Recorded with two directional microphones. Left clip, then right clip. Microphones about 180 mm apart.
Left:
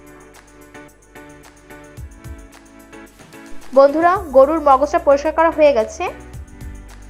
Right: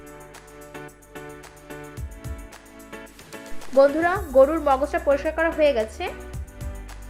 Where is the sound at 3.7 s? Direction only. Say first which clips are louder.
Left 6 dB; 10° left (ahead or behind).